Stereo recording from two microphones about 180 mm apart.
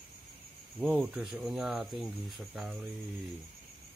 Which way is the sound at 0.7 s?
5° right (ahead or behind).